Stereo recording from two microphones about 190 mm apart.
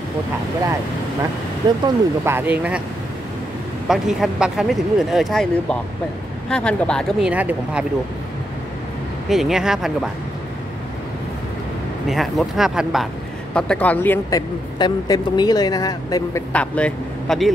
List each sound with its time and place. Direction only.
1.6 s speech: 20° right (ahead or behind)
3.8 s speech: centre (ahead or behind)
9.3 s speech: centre (ahead or behind)
12.1 s speech: centre (ahead or behind)
14.8 s speech: 20° left (ahead or behind)
16.5 s speech: 5° left (ahead or behind)